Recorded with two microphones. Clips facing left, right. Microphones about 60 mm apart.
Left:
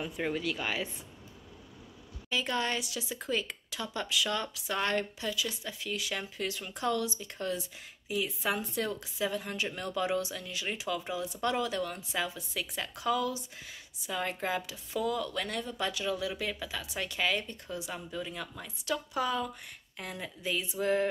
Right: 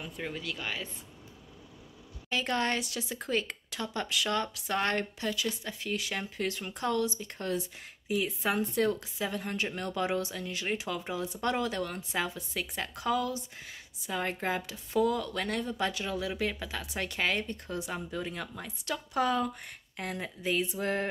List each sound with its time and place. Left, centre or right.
0.0 s speech: centre
0.3 s speech: centre
2.2 s speech: right